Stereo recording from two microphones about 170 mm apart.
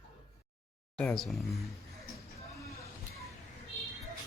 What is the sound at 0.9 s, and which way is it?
Speech, 5° left (ahead or behind).